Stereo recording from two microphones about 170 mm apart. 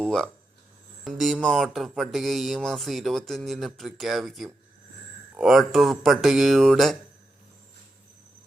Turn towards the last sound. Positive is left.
turn(degrees=0)  # may be behind; listen again after turning